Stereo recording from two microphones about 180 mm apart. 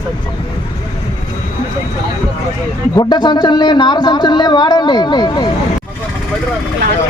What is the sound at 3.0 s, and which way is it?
Speech, 25° left (ahead or behind).